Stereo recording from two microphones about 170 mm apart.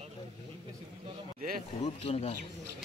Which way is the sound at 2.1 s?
40° left (ahead or behind).